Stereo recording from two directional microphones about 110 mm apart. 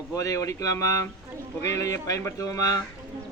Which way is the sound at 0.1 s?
30° left (ahead or behind).